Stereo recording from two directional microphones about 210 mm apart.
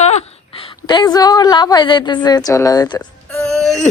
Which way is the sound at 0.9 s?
20° left (ahead or behind).